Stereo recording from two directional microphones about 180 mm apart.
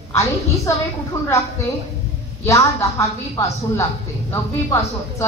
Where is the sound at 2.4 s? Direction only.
15° left (ahead or behind).